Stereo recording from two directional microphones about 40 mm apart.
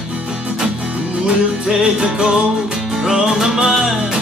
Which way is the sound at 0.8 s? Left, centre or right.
Right.